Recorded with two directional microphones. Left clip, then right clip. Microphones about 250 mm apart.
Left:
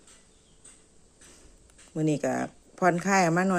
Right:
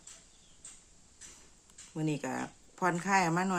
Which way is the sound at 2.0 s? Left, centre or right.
Centre.